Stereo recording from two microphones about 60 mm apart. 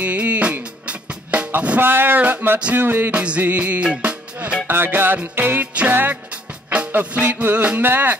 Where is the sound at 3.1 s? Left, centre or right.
Centre.